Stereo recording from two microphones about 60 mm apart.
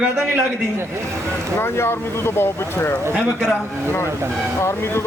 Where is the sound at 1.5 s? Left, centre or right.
Left.